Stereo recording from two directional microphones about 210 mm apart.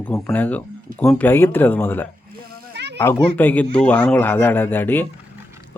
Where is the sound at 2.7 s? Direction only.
55° right (ahead or behind).